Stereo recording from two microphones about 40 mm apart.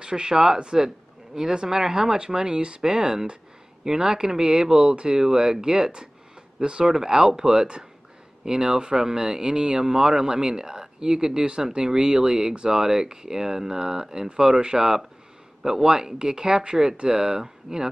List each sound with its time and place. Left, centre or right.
0.0 s speech: centre